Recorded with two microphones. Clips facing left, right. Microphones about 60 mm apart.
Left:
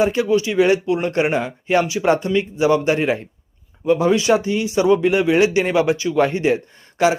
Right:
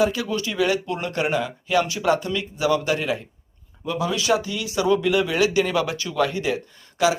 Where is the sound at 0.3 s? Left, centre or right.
Left.